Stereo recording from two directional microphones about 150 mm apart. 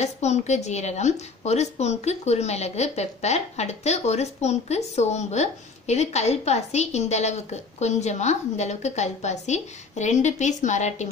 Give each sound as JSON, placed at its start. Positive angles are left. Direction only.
{"t": 0.0, "sound": "a woman's voice", "side_deg": 50}